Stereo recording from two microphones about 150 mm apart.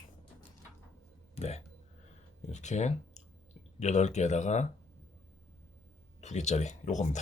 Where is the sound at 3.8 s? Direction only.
50° left (ahead or behind).